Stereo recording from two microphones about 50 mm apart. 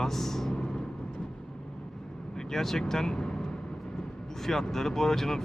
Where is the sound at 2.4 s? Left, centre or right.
Centre.